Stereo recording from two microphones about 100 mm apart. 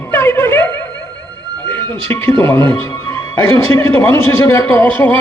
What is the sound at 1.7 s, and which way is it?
A man's voice, 20° left (ahead or behind).